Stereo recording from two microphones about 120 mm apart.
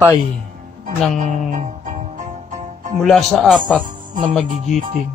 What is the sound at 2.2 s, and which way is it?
Music, 90° right.